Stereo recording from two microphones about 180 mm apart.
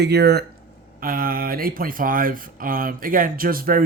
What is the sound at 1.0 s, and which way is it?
Speech, 50° right (ahead or behind).